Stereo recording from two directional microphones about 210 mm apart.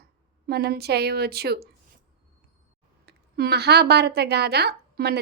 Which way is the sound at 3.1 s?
50° right (ahead or behind).